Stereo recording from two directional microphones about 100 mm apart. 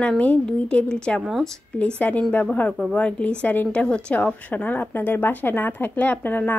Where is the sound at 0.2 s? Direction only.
10° left (ahead or behind).